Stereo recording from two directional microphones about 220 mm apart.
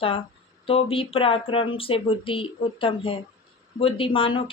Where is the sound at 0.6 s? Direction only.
25° left (ahead or behind).